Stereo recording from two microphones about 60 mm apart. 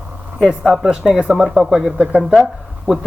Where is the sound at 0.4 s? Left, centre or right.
Centre.